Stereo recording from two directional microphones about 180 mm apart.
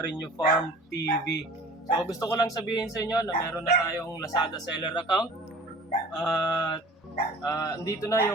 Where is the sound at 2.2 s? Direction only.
20° left (ahead or behind).